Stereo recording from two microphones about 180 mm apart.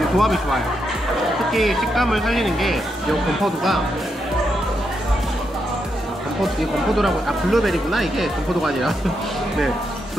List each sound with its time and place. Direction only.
0.2 s speech: centre (ahead or behind)
7.0 s speech: centre (ahead or behind)